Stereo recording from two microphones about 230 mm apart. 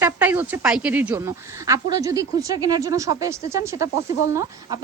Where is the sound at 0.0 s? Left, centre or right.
Centre.